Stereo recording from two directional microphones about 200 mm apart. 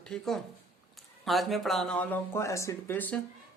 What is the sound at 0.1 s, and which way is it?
Speech, centre (ahead or behind).